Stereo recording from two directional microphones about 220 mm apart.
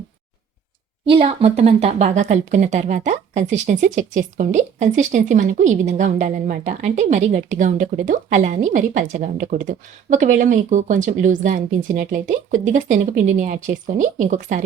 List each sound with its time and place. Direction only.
1.0 s speech: 25° right (ahead or behind)